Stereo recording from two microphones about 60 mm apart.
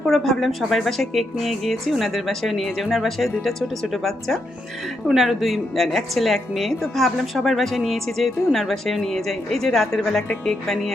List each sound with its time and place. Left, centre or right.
0.1 s a woman's voice: centre